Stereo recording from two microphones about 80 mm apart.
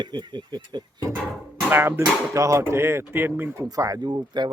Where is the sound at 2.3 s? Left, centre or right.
Right.